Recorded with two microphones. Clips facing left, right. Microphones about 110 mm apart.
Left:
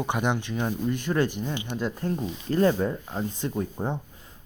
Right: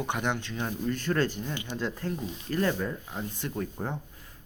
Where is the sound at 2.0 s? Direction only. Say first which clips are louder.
Left 5 dB; 25° left (ahead or behind).